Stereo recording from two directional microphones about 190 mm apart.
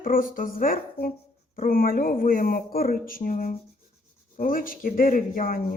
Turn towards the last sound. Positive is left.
turn(degrees=45)  # may be behind; listen again after turning